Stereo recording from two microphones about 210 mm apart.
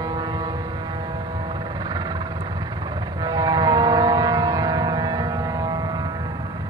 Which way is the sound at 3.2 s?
20° right (ahead or behind).